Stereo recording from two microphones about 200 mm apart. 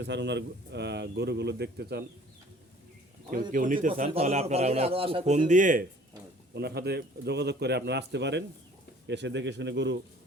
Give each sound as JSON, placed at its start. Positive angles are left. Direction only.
{"t": 0.0, "sound": "speech", "side_deg": -60}
{"t": 3.5, "sound": "a man's voice", "side_deg": -40}
{"t": 4.1, "sound": "a man's voice", "side_deg": -30}
{"t": 6.5, "sound": "speech", "side_deg": -55}